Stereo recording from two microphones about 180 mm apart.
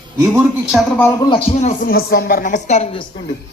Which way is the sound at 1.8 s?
55° left (ahead or behind).